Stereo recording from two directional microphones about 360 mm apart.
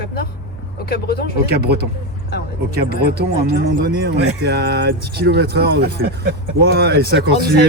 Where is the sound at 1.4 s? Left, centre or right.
Right.